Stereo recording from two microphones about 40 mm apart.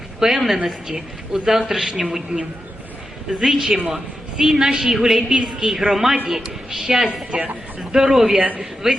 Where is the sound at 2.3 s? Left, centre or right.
Right.